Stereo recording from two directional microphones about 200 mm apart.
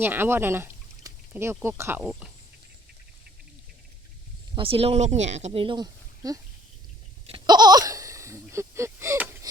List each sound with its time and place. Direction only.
0.0 s speech: 10° right (ahead or behind)
4.5 s speech: 30° right (ahead or behind)
7.3 s a sound: 25° right (ahead or behind)